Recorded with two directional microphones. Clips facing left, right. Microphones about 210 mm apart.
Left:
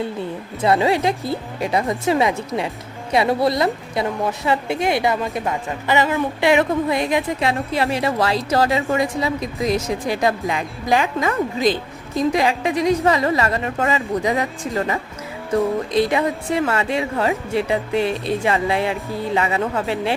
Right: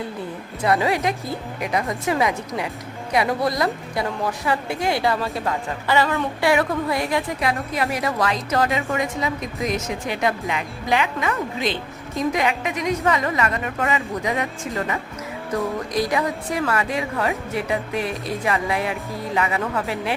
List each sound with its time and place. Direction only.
0.6 s a woman's voice: 25° left (ahead or behind)